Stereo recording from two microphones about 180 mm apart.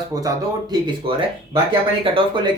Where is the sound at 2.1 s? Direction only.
25° right (ahead or behind).